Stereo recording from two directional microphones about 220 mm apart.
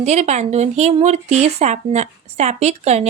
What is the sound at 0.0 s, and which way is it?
A woman's voice, 30° right (ahead or behind).